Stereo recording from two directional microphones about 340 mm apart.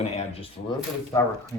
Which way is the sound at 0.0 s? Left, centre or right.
Centre.